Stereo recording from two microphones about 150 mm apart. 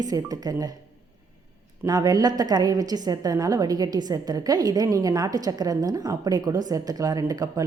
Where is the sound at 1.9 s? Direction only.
25° right (ahead or behind).